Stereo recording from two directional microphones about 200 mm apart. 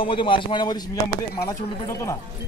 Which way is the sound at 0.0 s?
25° left (ahead or behind).